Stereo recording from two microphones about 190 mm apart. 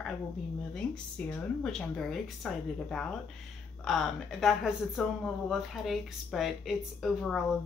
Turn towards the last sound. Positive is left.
turn(degrees=0)  # may be behind; listen again after turning